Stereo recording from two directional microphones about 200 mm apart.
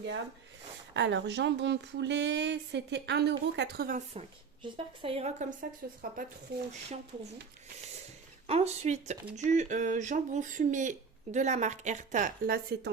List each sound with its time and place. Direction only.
0.9 s speech: 60° right (ahead or behind)
4.1 s speech: 30° right (ahead or behind)
6.5 s speech: 55° right (ahead or behind)
8.4 s speech: 35° right (ahead or behind); by 12.9 s 50° right (ahead or behind)